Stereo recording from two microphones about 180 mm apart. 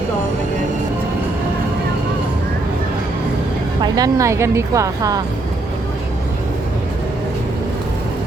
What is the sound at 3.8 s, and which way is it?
A woman's voice, 20° right (ahead or behind).